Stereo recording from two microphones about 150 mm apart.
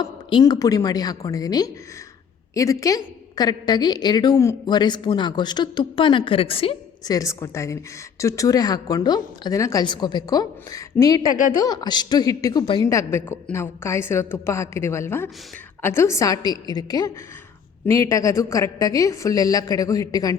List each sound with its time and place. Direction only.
0.0 s a woman's voice: 30° left (ahead or behind)
7.0 s a woman's voice: 25° left (ahead or behind)